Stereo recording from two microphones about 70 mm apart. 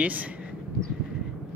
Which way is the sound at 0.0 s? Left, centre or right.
Right.